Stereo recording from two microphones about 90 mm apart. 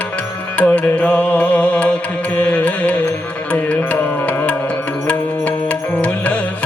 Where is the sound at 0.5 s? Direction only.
15° left (ahead or behind).